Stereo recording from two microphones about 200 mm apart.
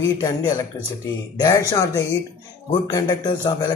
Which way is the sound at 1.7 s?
15° left (ahead or behind).